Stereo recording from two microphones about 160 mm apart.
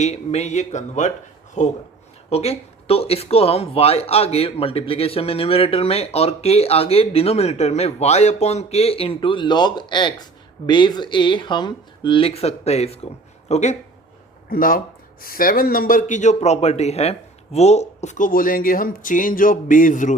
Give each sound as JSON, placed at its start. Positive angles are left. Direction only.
{"t": 0.0, "sound": "speech", "side_deg": 45}
{"t": 14.5, "sound": "speech", "side_deg": 60}